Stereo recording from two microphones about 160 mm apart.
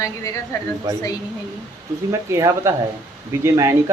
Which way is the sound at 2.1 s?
20° right (ahead or behind).